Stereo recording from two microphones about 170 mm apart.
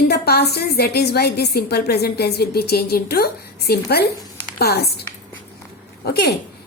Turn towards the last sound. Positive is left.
turn(degrees=70)  # may be behind; listen again after turning